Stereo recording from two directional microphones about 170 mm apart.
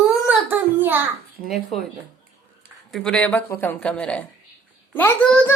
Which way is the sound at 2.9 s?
5° left (ahead or behind).